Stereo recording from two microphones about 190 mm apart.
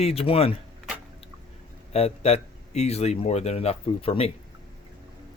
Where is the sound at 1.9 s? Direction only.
35° left (ahead or behind).